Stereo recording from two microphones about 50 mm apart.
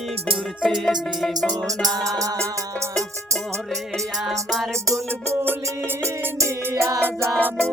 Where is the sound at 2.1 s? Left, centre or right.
Right.